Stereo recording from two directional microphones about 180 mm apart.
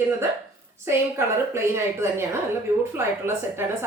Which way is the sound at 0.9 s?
15° right (ahead or behind).